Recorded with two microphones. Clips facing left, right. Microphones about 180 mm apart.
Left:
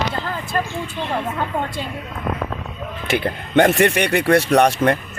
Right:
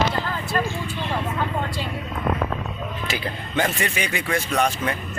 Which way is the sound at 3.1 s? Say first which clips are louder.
Left 7 dB; 70° left (ahead or behind).